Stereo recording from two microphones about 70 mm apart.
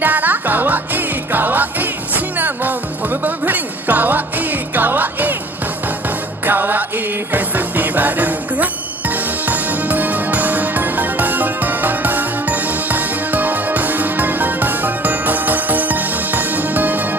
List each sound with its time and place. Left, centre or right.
0.0 s music: right
6.4 s music: right